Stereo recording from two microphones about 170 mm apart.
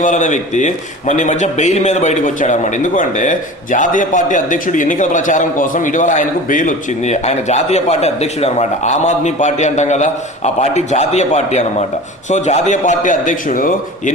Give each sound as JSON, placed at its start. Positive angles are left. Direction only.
{"t": 0.0, "sound": "a man's voice", "side_deg": 45}